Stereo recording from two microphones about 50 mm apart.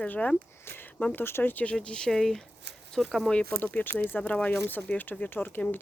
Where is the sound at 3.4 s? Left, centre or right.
Left.